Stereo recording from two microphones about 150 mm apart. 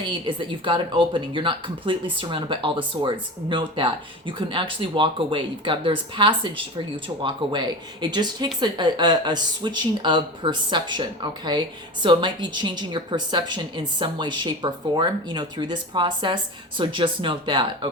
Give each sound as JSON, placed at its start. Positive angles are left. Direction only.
{"t": 0.0, "sound": "a woman's voice", "side_deg": -30}